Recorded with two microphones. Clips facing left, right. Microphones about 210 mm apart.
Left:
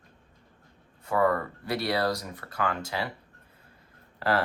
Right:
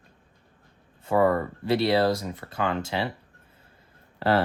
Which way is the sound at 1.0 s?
25° right (ahead or behind).